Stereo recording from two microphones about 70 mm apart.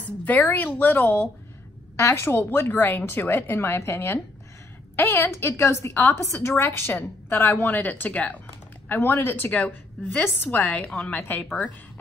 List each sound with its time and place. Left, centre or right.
0.2 s a woman's voice: left
2.0 s a woman's voice: left
9.5 s a woman's voice: left